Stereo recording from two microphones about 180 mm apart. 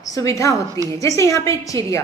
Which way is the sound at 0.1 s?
15° left (ahead or behind).